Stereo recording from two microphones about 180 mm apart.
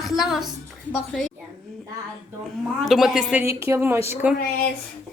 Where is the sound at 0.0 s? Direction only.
Centre (ahead or behind).